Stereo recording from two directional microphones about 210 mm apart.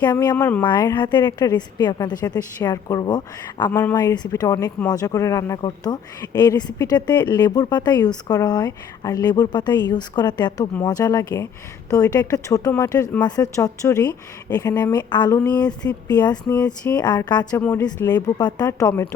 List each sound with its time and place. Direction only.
0.0 s speech: 15° left (ahead or behind)
3.9 s speech: 20° left (ahead or behind)
16.6 s speech: 5° left (ahead or behind)
17.0 s speech: 20° left (ahead or behind)
17.6 s speech: 10° left (ahead or behind)
17.8 s speech: 20° left (ahead or behind)